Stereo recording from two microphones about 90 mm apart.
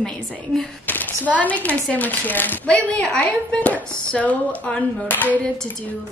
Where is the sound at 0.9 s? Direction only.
20° left (ahead or behind).